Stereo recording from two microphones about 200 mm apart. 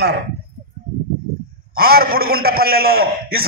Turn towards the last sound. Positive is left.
turn(degrees=-50)  # may be behind; listen again after turning